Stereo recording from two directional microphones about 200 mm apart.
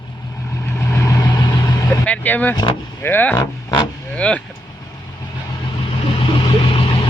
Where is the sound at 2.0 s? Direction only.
10° left (ahead or behind).